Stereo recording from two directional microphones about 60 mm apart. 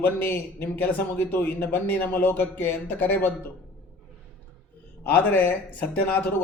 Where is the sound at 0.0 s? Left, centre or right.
Left.